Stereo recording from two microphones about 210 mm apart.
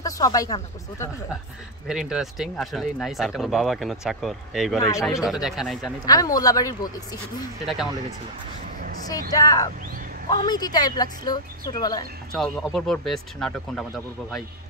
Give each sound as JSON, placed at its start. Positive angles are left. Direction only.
{"t": 0.0, "sound": "speech", "side_deg": 15}
{"t": 1.9, "sound": "speech", "side_deg": -5}
{"t": 6.0, "sound": "speech", "side_deg": 15}
{"t": 7.6, "sound": "speech", "side_deg": 0}
{"t": 9.3, "sound": "a woman's voice", "side_deg": 15}
{"t": 12.7, "sound": "speech", "side_deg": 0}